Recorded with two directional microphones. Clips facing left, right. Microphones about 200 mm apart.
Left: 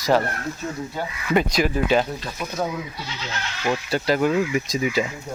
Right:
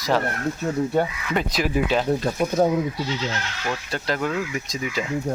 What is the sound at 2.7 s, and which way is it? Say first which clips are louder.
Speech: right 8 dB; 35° right (ahead or behind).